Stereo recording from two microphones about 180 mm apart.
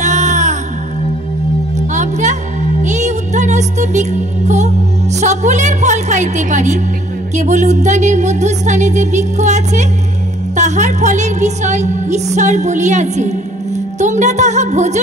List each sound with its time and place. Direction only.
0.0 s music: 40° right (ahead or behind)
1.8 s music: 40° right (ahead or behind)
5.2 s a sound: 40° right (ahead or behind)
7.3 s a woman's voice: 40° right (ahead or behind)